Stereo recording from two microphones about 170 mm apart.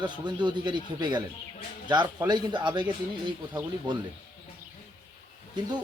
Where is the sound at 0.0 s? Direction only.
25° right (ahead or behind).